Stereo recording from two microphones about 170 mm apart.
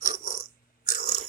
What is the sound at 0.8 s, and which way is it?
Chewing, 65° left (ahead or behind).